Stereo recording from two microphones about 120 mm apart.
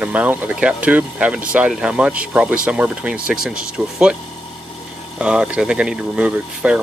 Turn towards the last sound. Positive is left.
turn(degrees=-10)  # may be behind; listen again after turning